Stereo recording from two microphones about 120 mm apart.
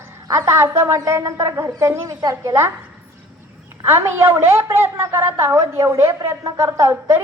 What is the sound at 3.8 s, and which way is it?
A woman's voice, 20° right (ahead or behind).